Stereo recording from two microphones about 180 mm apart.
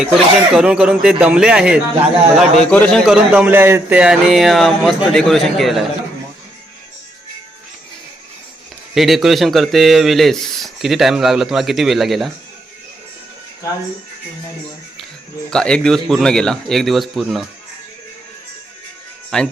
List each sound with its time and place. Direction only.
0.0 s a man's voice: 5° right (ahead or behind)
3.3 s a man's voice: 10° right (ahead or behind)
9.0 s a man's voice: centre (ahead or behind)
15.4 s a man's voice: 5° left (ahead or behind)
19.3 s a man's voice: 5° left (ahead or behind)